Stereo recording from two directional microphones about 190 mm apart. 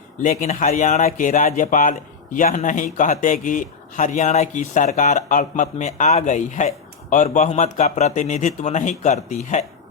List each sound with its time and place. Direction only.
0.2 s speech: 40° left (ahead or behind)